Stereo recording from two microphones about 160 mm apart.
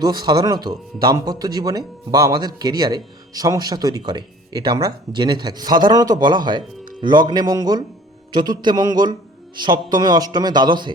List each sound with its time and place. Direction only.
0.0 s speech: 25° right (ahead or behind)